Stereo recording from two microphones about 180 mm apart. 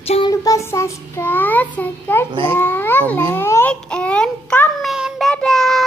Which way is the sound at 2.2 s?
30° right (ahead or behind).